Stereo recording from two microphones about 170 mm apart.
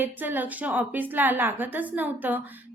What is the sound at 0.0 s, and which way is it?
A woman's voice, 10° right (ahead or behind).